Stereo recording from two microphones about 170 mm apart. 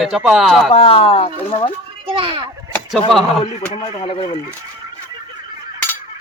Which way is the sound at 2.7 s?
5° left (ahead or behind).